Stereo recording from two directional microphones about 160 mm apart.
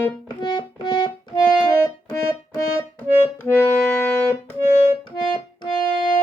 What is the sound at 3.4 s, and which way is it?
Music, 15° left (ahead or behind).